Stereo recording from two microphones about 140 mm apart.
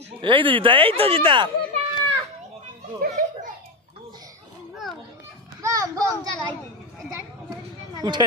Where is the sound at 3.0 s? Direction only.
90° right.